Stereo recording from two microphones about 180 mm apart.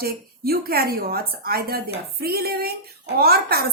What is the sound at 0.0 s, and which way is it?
A woman's voice, 60° right (ahead or behind).